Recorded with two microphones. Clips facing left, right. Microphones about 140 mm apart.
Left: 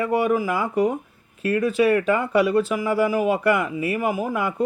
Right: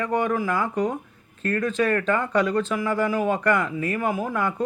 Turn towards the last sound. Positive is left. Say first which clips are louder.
# left 1 dB
turn(degrees=10)  # may be behind; listen again after turning